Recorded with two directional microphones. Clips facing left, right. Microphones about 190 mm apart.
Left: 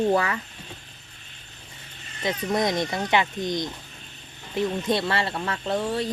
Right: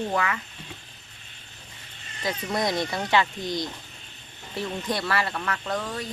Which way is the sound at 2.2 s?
20° left (ahead or behind).